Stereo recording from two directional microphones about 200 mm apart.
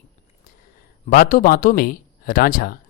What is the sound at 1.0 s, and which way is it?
Speech, 45° left (ahead or behind).